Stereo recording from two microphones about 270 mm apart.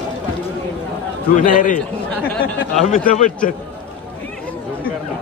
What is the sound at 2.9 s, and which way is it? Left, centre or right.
Speech, left.